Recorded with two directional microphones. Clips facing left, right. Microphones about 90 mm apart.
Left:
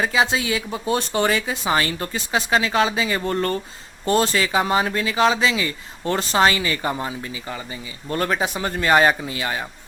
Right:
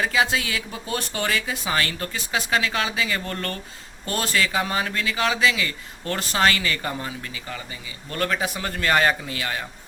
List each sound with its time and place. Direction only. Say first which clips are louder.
0.0 s speech: left 2 dB; 25° left (ahead or behind)